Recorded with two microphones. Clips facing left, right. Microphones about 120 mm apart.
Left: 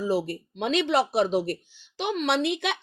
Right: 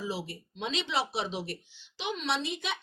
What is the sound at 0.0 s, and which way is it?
Speech, 50° left (ahead or behind).